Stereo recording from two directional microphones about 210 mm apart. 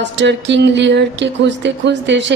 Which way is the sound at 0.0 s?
55° right (ahead or behind).